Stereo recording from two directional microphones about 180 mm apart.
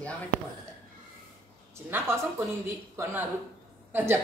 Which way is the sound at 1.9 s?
15° right (ahead or behind).